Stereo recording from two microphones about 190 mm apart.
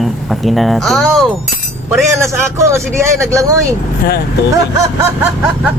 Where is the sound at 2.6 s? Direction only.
15° right (ahead or behind).